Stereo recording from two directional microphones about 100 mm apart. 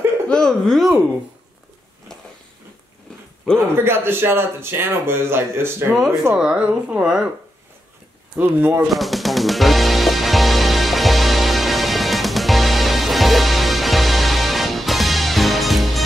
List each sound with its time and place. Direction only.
0.3 s speech: 5° left (ahead or behind)
3.5 s speech: 25° right (ahead or behind)
6.3 s a woman's voice: 10° right (ahead or behind)
8.4 s speech: 20° right (ahead or behind)
8.8 s music: centre (ahead or behind)